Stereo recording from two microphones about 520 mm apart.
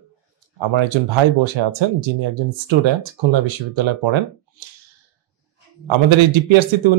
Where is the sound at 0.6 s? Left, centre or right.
Right.